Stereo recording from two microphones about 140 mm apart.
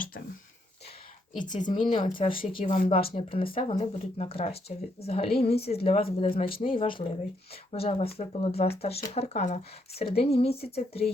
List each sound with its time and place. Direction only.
1.4 s speech: 65° left (ahead or behind)
1.7 s speech: 40° left (ahead or behind)